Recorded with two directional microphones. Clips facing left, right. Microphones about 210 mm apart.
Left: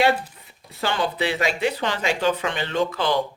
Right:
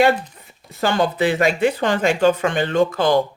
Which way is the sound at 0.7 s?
45° right (ahead or behind).